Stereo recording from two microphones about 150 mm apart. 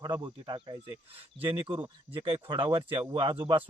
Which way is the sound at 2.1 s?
35° right (ahead or behind).